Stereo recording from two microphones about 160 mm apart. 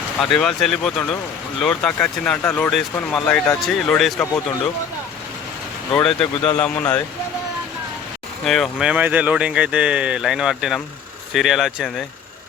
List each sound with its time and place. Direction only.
0.2 s speech: 5° left (ahead or behind)
5.9 s speech: 5° left (ahead or behind)
8.4 s speech: centre (ahead or behind)